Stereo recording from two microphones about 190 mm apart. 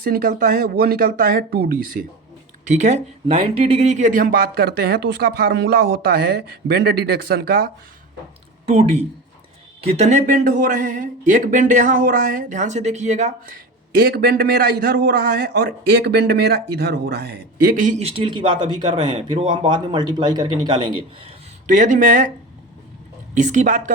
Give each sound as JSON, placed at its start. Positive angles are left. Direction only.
{"t": 0.0, "sound": "speech", "side_deg": -50}
{"t": 2.6, "sound": "speech", "side_deg": -40}
{"t": 8.6, "sound": "speech", "side_deg": -35}
{"t": 13.9, "sound": "a man's voice", "side_deg": -55}
{"t": 21.7, "sound": "speech", "side_deg": -40}
{"t": 23.3, "sound": "speech", "side_deg": -40}